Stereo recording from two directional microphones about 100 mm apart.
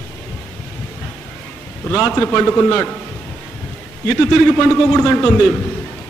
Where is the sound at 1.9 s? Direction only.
10° left (ahead or behind).